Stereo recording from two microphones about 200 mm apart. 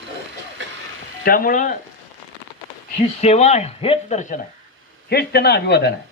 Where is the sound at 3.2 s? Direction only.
35° left (ahead or behind).